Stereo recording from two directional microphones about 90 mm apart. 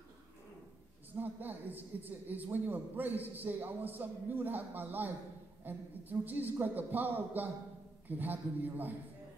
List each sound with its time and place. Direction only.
1.1 s a woman's voice: 20° right (ahead or behind)